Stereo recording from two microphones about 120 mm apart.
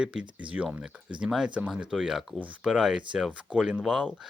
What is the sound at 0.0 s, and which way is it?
Speech, 10° right (ahead or behind).